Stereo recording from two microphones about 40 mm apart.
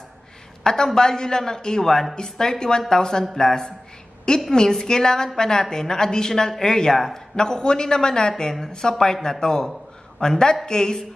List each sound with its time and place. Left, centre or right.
0.7 s a woman's voice: centre